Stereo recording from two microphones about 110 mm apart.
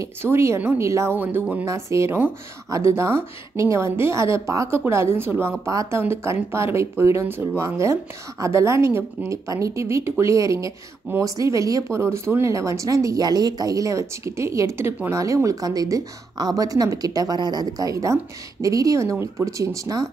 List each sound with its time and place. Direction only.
0.0 s a woman's voice: 25° right (ahead or behind)
1.7 s a woman's voice: 30° right (ahead or behind)